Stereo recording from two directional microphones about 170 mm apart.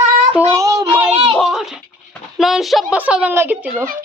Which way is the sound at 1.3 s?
Centre (ahead or behind).